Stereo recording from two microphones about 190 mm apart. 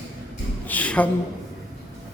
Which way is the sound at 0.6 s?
10° left (ahead or behind).